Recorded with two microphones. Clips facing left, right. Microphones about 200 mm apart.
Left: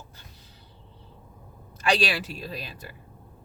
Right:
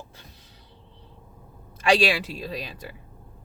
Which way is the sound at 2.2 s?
Centre (ahead or behind).